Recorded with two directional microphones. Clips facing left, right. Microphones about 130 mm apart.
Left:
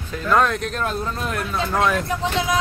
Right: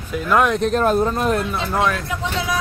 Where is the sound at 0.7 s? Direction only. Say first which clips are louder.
Right 8 dB; 50° right (ahead or behind).